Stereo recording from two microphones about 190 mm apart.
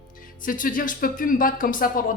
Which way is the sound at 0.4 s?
45° left (ahead or behind).